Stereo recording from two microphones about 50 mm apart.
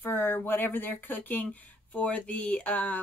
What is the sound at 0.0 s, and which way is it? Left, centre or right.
Speech, left.